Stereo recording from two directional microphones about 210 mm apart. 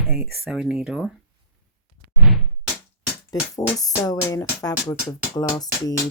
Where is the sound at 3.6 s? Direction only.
15° left (ahead or behind).